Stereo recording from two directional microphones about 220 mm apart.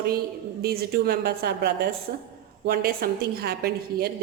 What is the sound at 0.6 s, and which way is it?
A woman's voice, 45° right (ahead or behind).